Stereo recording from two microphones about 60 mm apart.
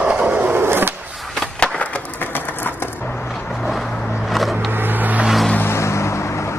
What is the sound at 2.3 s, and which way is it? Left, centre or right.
Bird, left.